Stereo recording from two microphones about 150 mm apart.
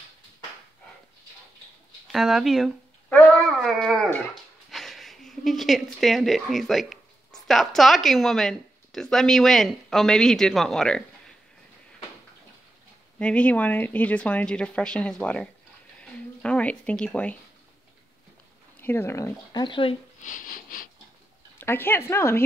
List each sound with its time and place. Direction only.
2.1 s speech: centre (ahead or behind)
3.1 s a sound: 10° left (ahead or behind)
3.5 s speech: centre (ahead or behind)
13.2 s a woman's voice: 10° left (ahead or behind)
16.0 s a sound: 5° left (ahead or behind)
18.8 s speech: 15° left (ahead or behind); by 20.0 s 35° left (ahead or behind)
20.2 s speech: 60° left (ahead or behind)
21.5 s a woman's voice: 15° left (ahead or behind)